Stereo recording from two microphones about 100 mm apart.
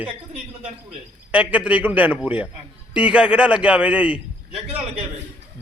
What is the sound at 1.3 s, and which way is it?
A man's voice, 15° right (ahead or behind).